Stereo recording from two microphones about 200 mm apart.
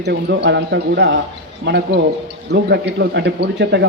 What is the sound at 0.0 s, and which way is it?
Speech, 60° right (ahead or behind).